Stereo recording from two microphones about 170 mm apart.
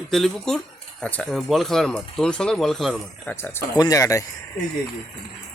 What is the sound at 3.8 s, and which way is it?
Speech, 20° left (ahead or behind).